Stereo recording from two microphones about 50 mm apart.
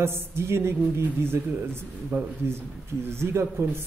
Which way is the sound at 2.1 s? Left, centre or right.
Right.